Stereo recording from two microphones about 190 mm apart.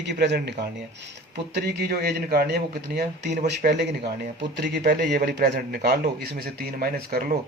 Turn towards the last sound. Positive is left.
turn(degrees=-50)  # may be behind; listen again after turning